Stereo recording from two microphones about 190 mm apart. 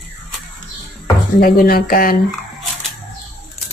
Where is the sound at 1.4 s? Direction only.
50° left (ahead or behind).